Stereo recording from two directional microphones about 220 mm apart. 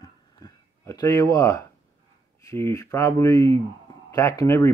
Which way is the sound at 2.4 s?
15° left (ahead or behind).